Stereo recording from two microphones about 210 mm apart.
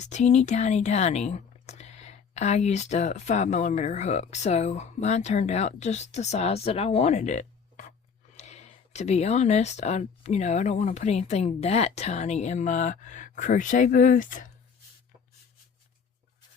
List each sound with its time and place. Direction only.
0.0 s speech: 35° left (ahead or behind)